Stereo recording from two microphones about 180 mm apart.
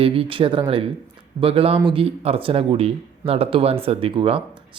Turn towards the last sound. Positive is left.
turn(degrees=-30)  # may be behind; listen again after turning